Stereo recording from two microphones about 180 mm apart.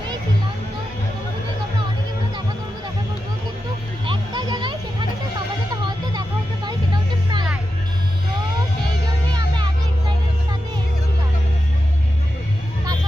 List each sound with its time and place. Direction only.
4.0 s music: 25° right (ahead or behind)
6.7 s music: 25° right (ahead or behind)